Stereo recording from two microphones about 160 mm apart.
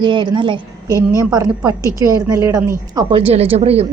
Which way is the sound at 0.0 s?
30° right (ahead or behind).